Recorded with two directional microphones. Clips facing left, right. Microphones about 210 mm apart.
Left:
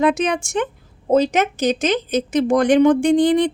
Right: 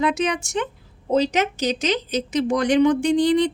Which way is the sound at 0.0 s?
50° left (ahead or behind).